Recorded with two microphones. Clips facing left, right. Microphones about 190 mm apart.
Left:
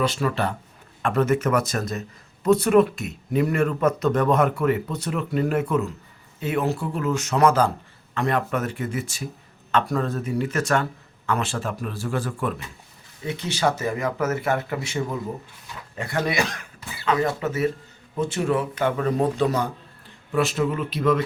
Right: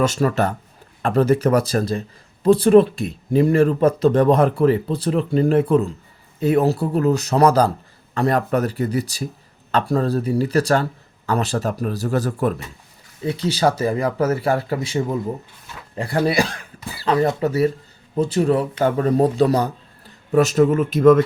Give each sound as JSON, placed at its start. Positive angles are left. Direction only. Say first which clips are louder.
{"t": 0.0, "sound": "speech", "louder": "right 5 dB", "side_deg": -45}